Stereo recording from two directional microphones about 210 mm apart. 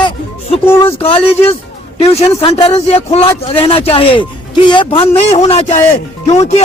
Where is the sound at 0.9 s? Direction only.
25° left (ahead or behind).